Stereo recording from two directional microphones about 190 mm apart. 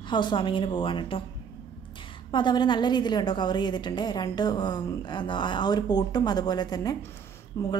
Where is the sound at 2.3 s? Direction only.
25° left (ahead or behind).